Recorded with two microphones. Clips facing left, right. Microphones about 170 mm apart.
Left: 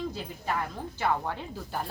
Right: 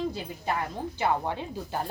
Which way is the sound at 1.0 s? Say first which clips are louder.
Right 2 dB; 20° right (ahead or behind).